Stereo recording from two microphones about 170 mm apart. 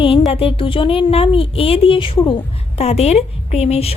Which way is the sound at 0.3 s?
35° left (ahead or behind).